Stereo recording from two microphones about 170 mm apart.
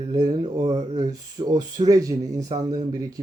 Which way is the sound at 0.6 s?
40° right (ahead or behind).